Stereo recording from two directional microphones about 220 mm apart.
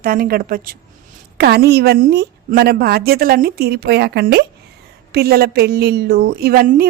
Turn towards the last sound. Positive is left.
turn(degrees=-45)  # may be behind; listen again after turning